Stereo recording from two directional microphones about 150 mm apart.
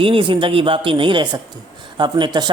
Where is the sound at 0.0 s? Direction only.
35° right (ahead or behind).